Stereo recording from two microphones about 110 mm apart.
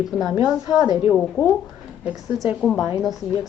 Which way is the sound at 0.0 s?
5° right (ahead or behind).